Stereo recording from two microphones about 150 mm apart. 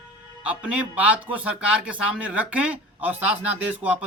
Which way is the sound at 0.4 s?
10° right (ahead or behind).